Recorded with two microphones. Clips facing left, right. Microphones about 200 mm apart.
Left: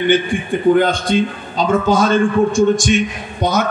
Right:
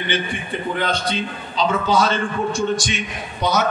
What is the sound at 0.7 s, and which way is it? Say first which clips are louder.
A man's voice: left 8 dB; 50° left (ahead or behind).